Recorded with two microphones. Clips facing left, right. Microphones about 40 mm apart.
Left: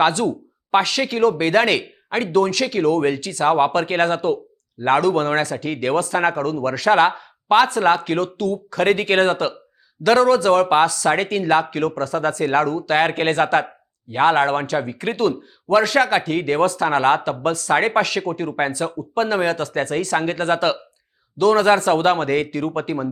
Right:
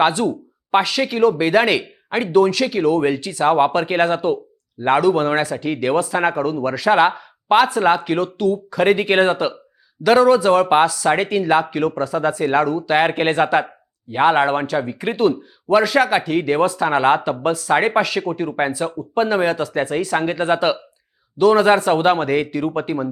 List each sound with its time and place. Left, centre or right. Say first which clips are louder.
0.0 s speech: right 1 dB; centre